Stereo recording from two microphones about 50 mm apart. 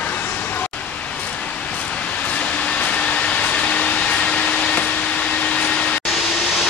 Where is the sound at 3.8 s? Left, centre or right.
Centre.